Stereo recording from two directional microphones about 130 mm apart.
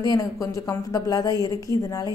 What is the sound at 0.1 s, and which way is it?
A woman's voice, 25° left (ahead or behind).